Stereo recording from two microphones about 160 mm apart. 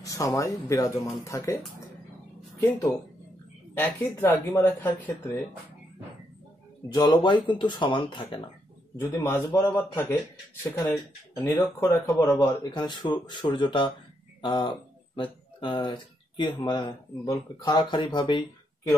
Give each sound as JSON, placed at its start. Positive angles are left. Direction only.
{"t": 0.0, "sound": "speech", "side_deg": 20}
{"t": 3.7, "sound": "speech", "side_deg": 15}
{"t": 6.9, "sound": "speech", "side_deg": 25}
{"t": 9.1, "sound": "speech", "side_deg": 15}